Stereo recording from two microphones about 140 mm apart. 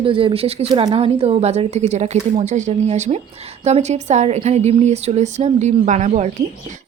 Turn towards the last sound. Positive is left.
turn(degrees=-55)  # may be behind; listen again after turning